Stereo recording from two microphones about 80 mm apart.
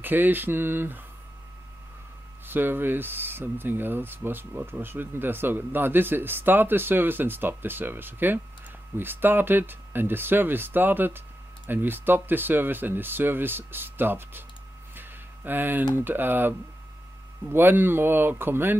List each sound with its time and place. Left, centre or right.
0.0 s speech: right
2.4 s speech: right
15.0 s a sound: right
15.9 s speech: right